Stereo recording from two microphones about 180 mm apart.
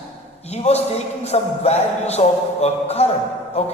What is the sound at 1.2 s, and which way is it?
A woman's voice, 35° left (ahead or behind).